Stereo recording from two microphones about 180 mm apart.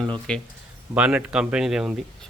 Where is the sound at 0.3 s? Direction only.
5° left (ahead or behind).